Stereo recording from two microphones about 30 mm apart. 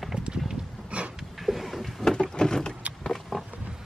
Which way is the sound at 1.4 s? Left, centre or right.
Centre.